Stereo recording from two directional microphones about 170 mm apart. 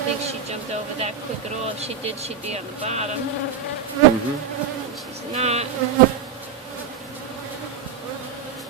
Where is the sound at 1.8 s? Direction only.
40° right (ahead or behind).